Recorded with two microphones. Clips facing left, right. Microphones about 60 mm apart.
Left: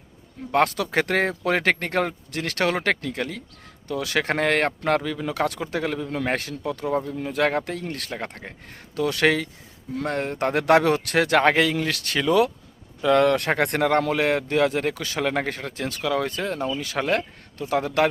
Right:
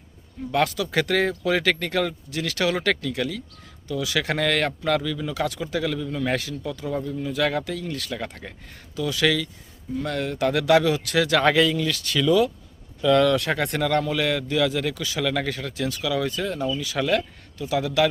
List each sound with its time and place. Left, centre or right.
0.5 s a man's voice: left
2.9 s a man's voice: left
5.2 s a man's voice: left
9.0 s a man's voice: left